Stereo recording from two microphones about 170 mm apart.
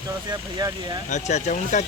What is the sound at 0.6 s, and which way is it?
Speech, 25° right (ahead or behind).